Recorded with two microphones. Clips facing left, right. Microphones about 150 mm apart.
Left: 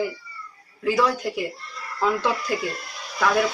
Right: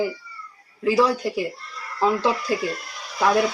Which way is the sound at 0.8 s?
30° right (ahead or behind).